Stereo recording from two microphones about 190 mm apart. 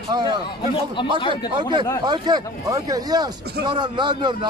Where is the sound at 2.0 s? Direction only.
20° right (ahead or behind).